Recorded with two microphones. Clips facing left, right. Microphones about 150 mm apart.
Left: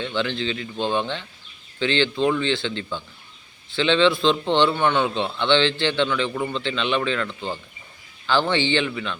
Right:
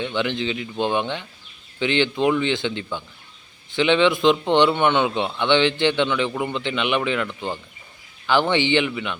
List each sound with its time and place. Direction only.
0.0 s a man's voice: 15° right (ahead or behind)